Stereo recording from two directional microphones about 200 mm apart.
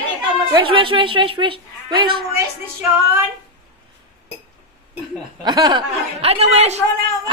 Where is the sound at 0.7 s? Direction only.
25° right (ahead or behind).